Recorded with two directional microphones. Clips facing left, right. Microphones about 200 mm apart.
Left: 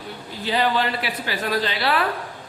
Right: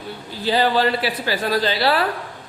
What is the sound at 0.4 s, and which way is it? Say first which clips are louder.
A man's voice: right 4 dB; 35° right (ahead or behind).